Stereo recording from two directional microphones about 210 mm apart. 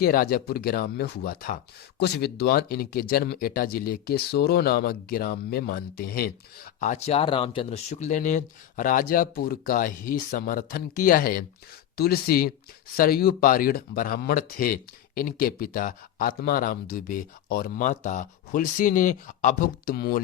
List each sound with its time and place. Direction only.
0.0 s speech: 45° left (ahead or behind)
6.7 s speech: 35° left (ahead or behind)